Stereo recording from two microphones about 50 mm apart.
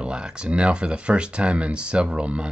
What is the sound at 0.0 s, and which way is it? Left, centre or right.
Speech, centre.